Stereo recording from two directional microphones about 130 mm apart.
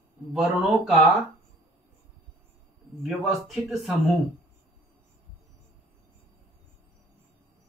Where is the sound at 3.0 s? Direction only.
Centre (ahead or behind).